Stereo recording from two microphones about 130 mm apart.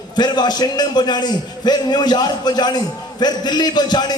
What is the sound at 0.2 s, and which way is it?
A man's voice, 35° left (ahead or behind).